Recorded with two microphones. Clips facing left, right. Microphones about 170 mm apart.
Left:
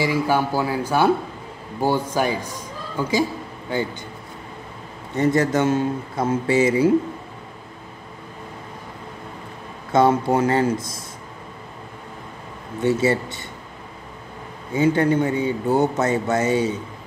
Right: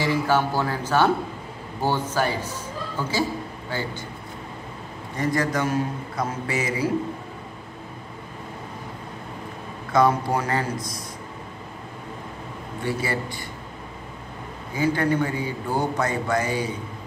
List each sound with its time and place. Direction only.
0.0 s speech: 10° left (ahead or behind)
5.1 s speech: 25° left (ahead or behind)
9.9 s speech: 25° left (ahead or behind)
12.8 s speech: 25° left (ahead or behind)
14.7 s speech: 25° left (ahead or behind)